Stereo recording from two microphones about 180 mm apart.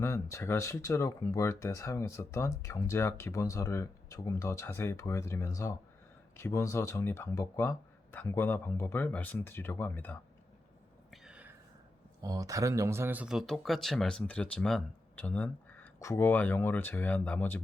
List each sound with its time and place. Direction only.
0.0 s speech: 15° left (ahead or behind)
11.1 s a sound: 5° right (ahead or behind)
12.2 s speech: 20° right (ahead or behind); by 17.6 s 10° left (ahead or behind)